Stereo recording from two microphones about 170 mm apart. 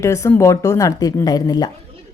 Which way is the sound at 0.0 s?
15° left (ahead or behind).